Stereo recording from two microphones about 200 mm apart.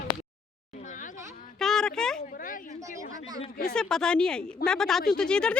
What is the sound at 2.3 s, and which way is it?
Speech, 45° left (ahead or behind).